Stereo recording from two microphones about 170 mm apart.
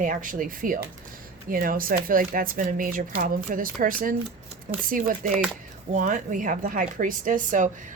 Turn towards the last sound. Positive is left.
turn(degrees=-50)  # may be behind; listen again after turning